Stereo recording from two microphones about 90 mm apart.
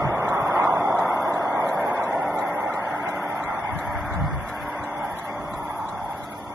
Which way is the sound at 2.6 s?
15° right (ahead or behind).